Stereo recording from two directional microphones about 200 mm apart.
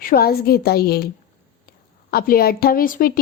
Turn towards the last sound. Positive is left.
turn(degrees=45)  # may be behind; listen again after turning